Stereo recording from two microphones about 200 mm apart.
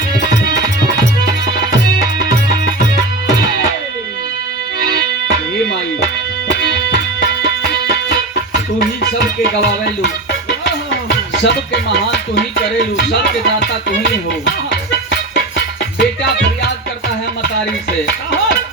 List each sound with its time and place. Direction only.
9.4 s music: 60° left (ahead or behind)
11.4 s music: 60° left (ahead or behind)
15.5 s music: 60° left (ahead or behind)